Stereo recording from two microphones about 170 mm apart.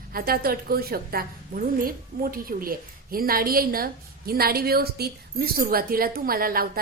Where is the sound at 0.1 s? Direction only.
60° right (ahead or behind).